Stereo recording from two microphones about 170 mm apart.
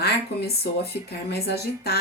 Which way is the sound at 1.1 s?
70° left (ahead or behind).